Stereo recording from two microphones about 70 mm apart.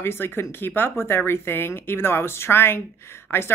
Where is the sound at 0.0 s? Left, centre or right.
Left.